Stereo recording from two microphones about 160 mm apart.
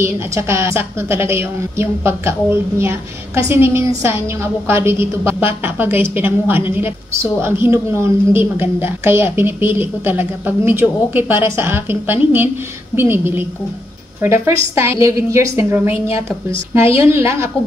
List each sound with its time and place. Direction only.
0.0 s a woman's voice: 15° right (ahead or behind)